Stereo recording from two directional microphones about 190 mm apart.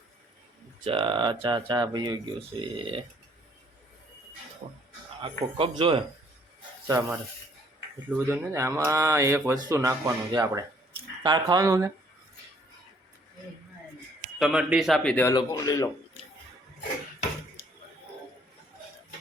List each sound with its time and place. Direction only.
0.9 s speech: 25° right (ahead or behind)
4.6 s speech: 35° right (ahead or behind); by 11.9 s 20° right (ahead or behind)
14.3 s a man's voice: 5° right (ahead or behind)
15.3 s speech: 20° left (ahead or behind)